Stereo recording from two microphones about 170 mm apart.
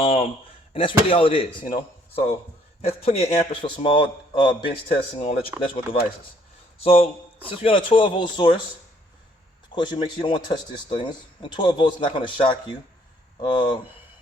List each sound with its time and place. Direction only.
0.0 s a sound: 35° left (ahead or behind)
0.7 s a man's voice: 30° left (ahead or behind)
2.8 s a man's voice: 40° left (ahead or behind)
9.7 s speech: 30° left (ahead or behind)